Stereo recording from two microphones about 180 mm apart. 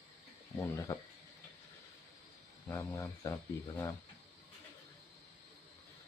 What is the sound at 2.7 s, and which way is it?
Speech, 15° left (ahead or behind).